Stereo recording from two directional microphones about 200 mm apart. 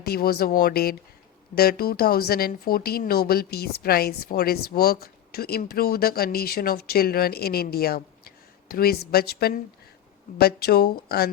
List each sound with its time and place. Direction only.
0.0 s speech: 50° left (ahead or behind)